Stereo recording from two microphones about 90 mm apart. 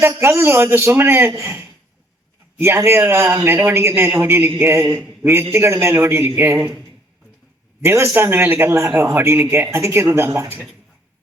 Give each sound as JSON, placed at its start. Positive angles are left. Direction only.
{"t": 0.2, "sound": "a man's voice", "side_deg": -30}
{"t": 7.9, "sound": "a man's voice", "side_deg": -30}